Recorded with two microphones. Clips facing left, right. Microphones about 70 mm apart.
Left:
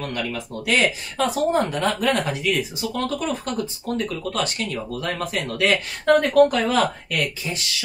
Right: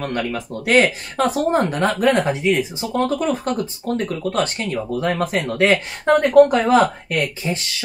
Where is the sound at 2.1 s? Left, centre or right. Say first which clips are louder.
Right 5 dB; right.